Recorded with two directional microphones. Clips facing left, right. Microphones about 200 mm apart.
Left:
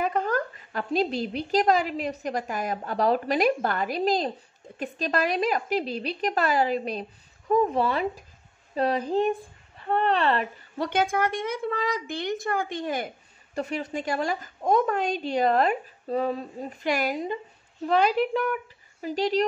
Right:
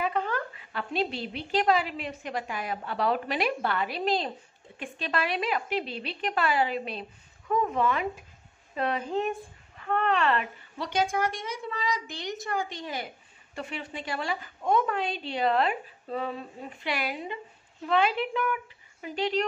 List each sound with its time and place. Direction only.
0.0 s a woman's voice: 45° left (ahead or behind)
10.8 s a woman's voice: 55° left (ahead or behind); by 19.4 s 35° left (ahead or behind)